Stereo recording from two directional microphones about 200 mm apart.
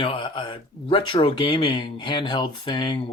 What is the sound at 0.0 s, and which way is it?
Speech, 25° left (ahead or behind).